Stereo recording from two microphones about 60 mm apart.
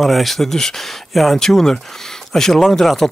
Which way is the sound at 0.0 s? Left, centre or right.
Centre.